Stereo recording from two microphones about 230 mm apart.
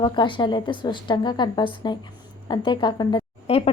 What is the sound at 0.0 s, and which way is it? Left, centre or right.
A woman's voice, left.